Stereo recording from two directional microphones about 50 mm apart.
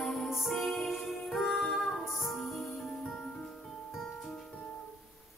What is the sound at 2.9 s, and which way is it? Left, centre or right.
Music, centre.